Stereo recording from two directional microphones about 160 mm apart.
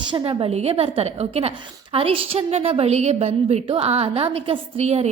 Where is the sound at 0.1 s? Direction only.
30° right (ahead or behind).